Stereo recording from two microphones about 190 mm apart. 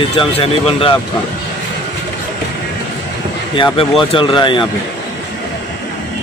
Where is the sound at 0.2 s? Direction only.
30° left (ahead or behind).